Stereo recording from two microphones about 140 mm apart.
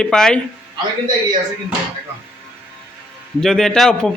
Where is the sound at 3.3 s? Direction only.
5° left (ahead or behind).